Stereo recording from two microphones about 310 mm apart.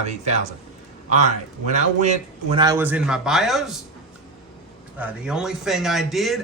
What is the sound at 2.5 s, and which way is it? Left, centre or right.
Speech, centre.